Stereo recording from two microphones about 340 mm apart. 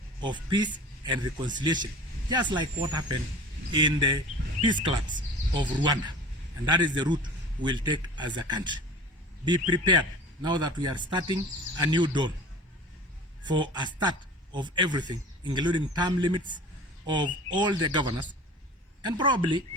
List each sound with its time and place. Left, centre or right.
0.2 s speech: centre
13.4 s speech: centre